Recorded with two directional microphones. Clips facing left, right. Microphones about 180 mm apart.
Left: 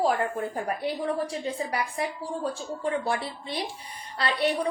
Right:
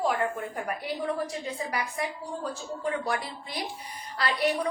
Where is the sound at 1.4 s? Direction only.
30° left (ahead or behind).